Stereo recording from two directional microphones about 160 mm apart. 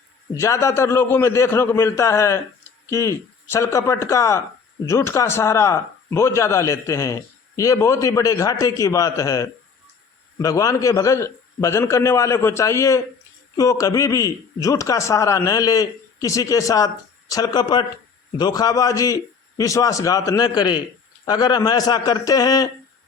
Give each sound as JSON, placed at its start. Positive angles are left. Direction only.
{"t": 0.3, "sound": "a man's voice", "side_deg": 20}